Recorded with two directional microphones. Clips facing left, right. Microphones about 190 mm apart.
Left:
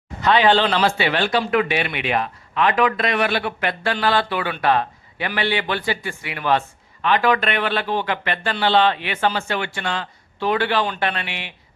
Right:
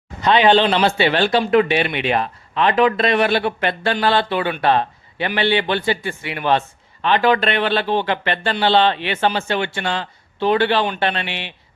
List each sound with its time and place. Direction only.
0.2 s speech: 20° right (ahead or behind)